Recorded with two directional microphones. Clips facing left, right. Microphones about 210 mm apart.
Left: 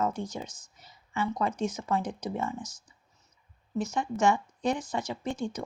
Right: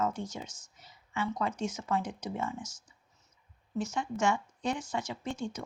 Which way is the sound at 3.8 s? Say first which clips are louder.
Left 4 dB; 35° left (ahead or behind).